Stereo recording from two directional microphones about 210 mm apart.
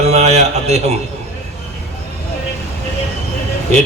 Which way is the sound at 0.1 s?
30° right (ahead or behind).